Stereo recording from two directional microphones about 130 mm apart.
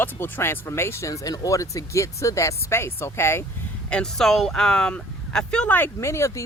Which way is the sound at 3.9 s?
5° left (ahead or behind).